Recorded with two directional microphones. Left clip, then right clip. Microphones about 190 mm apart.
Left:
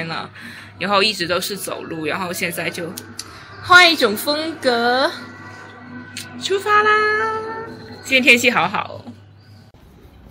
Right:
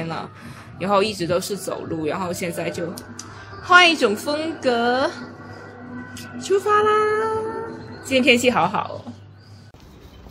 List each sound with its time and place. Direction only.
0.0 s speech: 5° right (ahead or behind)
3.2 s a woman's voice: 10° left (ahead or behind)
6.1 s speech: 10° right (ahead or behind)